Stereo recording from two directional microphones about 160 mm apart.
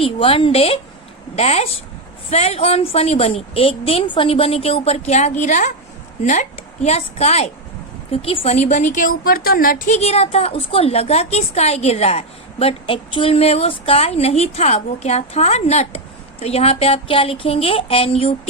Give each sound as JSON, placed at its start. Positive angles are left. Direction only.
{"t": 0.0, "sound": "a woman's voice", "side_deg": 35}